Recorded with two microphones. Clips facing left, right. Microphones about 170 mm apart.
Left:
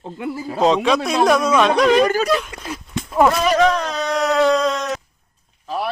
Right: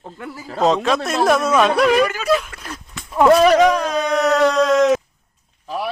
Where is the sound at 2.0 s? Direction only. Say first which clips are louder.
Left 2 dB; 35° left (ahead or behind).